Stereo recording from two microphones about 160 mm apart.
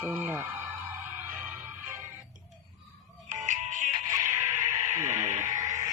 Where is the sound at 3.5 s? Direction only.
50° right (ahead or behind).